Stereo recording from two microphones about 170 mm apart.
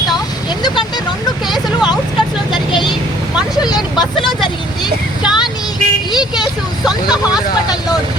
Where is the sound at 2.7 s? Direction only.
30° left (ahead or behind).